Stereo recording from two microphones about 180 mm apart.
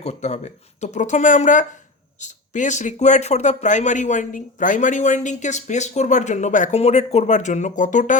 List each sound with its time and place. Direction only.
0.0 s speech: 40° left (ahead or behind)